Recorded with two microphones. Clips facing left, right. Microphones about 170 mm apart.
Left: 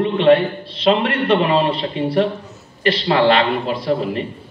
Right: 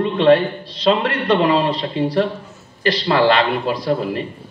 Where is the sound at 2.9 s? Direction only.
30° left (ahead or behind).